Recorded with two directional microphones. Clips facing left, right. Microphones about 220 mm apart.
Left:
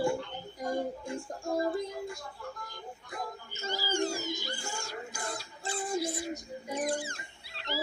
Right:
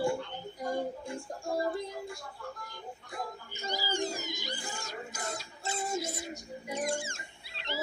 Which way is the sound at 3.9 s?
20° right (ahead or behind).